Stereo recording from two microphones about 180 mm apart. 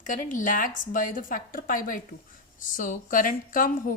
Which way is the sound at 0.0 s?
45° left (ahead or behind).